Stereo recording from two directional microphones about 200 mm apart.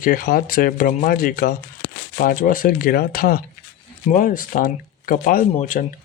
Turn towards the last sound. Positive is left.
turn(degrees=40)  # may be behind; listen again after turning